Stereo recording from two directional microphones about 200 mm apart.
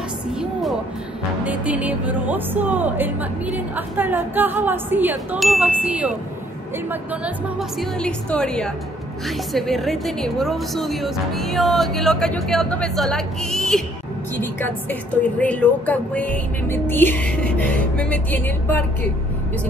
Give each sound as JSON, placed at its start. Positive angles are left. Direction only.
{"t": 1.4, "sound": "a woman's voice", "side_deg": -5}